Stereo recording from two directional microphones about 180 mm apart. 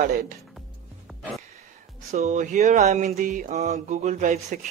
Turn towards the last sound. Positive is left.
turn(degrees=-45)  # may be behind; listen again after turning